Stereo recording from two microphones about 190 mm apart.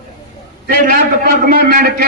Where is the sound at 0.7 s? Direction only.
45° right (ahead or behind).